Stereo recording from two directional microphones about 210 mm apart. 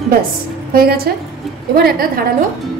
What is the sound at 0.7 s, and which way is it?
Speech, 45° right (ahead or behind).